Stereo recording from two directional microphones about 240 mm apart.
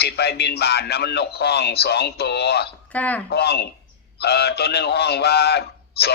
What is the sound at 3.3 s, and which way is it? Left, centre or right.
A man's voice, left.